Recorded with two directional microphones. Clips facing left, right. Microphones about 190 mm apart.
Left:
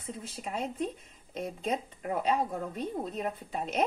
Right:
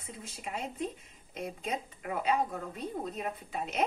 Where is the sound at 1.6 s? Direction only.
35° left (ahead or behind).